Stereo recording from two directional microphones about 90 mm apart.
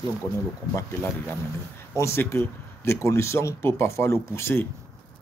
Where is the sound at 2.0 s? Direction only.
30° left (ahead or behind).